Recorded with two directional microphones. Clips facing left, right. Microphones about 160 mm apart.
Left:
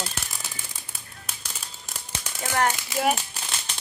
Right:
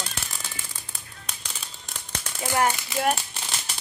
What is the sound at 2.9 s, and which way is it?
Speech, 5° left (ahead or behind).